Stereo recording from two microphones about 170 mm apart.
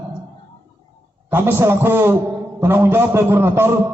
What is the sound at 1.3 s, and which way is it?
A man's voice, 15° right (ahead or behind).